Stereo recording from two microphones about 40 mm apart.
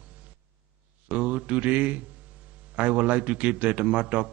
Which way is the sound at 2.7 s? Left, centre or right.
Right.